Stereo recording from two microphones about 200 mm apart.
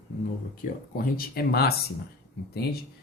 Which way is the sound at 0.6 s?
50° left (ahead or behind).